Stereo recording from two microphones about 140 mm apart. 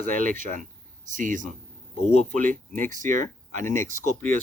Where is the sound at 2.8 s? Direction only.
70° right (ahead or behind).